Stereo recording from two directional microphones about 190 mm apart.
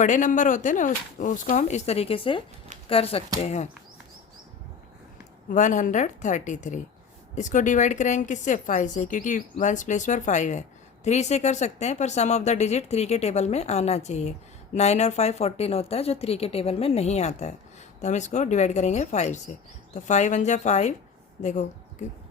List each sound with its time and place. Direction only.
0.0 s speech: 40° left (ahead or behind)
5.5 s speech: 40° left (ahead or behind)